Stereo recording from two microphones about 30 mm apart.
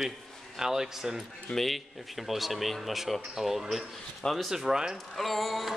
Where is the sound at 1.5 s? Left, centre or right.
Centre.